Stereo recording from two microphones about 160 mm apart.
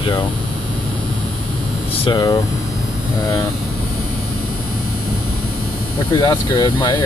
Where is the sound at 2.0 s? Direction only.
25° left (ahead or behind).